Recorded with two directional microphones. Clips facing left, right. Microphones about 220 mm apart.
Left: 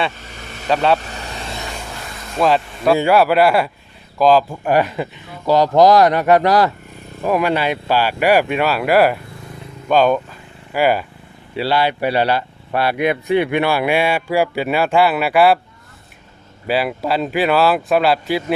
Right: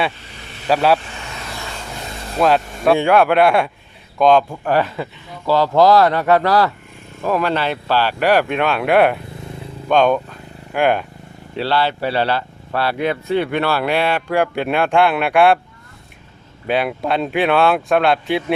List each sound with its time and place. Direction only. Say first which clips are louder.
0.4 s vehicle: left 4 dB; 45° left (ahead or behind)
0.7 s speech: right 1 dB; 5° right (ahead or behind)
0.9 s vehicle: left 2 dB; 40° left (ahead or behind)
2.4 s speech: even; centre (ahead or behind)
4.7 s speech: left 2 dB; 15° left (ahead or behind)
16.6 s speech: even; 5° left (ahead or behind)